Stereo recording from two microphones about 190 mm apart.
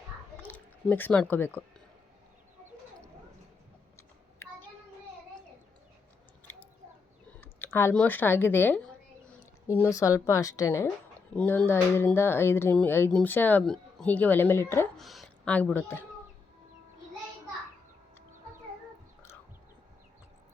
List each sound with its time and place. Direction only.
0.4 s speech: 10° left (ahead or behind)
7.4 s speech: 10° left (ahead or behind)
14.9 s speech: centre (ahead or behind)